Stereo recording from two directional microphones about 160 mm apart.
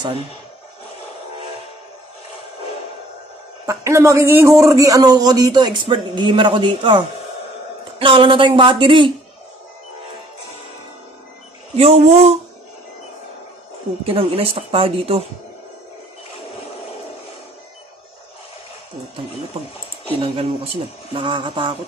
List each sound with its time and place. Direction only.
3.6 s a woman's voice: 20° right (ahead or behind)
8.0 s speech: 35° right (ahead or behind)
11.7 s speech: 40° right (ahead or behind)
14.0 s speech: 35° right (ahead or behind)
20.2 s speech: 35° right (ahead or behind)